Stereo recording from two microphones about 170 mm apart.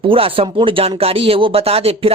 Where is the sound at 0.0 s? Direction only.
30° right (ahead or behind).